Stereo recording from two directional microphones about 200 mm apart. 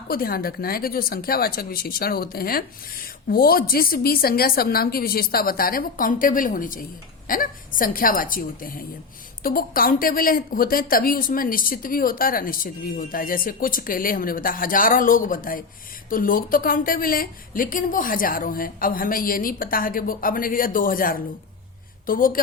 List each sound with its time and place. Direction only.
0.1 s speech: 50° left (ahead or behind)